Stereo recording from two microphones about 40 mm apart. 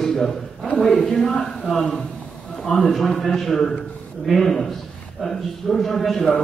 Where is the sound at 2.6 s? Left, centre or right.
Centre.